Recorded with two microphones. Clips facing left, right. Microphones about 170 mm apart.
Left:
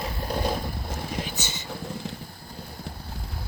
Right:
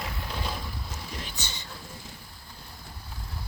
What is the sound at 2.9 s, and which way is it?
Boat, 70° left (ahead or behind).